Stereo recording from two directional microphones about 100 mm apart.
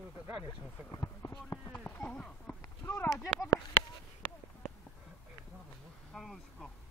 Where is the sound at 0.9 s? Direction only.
30° left (ahead or behind).